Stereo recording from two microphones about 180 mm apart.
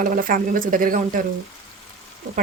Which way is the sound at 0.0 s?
50° right (ahead or behind).